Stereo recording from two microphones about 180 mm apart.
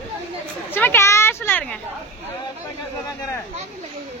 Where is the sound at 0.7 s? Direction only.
10° left (ahead or behind).